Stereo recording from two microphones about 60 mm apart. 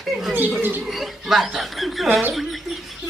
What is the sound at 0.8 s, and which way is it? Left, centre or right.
Speech, centre.